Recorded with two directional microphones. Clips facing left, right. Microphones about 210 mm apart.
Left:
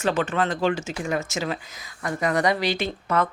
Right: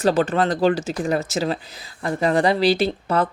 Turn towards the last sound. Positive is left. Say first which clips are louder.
# right 4 dB
turn(degrees=-35)  # may be behind; listen again after turning